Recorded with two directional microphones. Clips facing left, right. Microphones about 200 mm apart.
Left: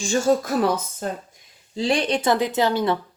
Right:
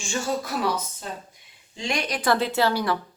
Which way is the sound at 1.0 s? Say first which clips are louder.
Left 7 dB; 50° left (ahead or behind).